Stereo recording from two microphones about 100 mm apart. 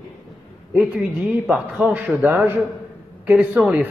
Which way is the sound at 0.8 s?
10° right (ahead or behind).